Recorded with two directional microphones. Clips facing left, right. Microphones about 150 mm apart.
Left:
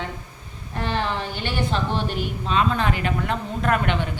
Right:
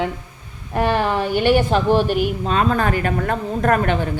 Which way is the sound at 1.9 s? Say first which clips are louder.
Right 9 dB; 10° right (ahead or behind).